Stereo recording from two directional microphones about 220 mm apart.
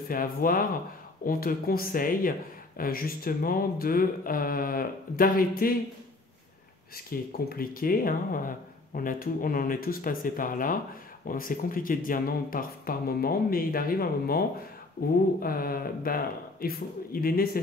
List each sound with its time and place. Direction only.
0.1 s speech: 40° left (ahead or behind)
7.1 s speech: 40° left (ahead or behind)
15.4 s speech: 40° left (ahead or behind)